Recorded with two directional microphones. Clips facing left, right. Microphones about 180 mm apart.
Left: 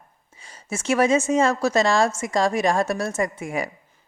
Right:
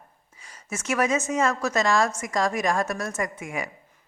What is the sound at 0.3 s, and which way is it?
A woman's voice, 30° left (ahead or behind).